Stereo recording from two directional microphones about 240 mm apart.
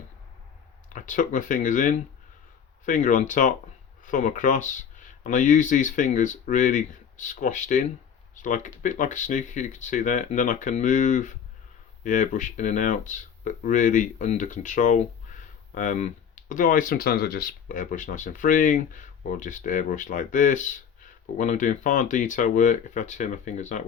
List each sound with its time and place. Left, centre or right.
0.9 s speech: left